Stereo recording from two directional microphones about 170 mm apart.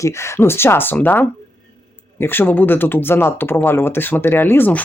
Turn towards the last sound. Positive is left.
turn(degrees=10)  # may be behind; listen again after turning